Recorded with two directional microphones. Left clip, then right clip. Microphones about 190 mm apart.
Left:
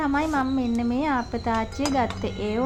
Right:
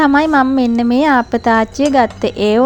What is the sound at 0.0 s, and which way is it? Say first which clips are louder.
A woman's voice: right 13 dB; 45° right (ahead or behind).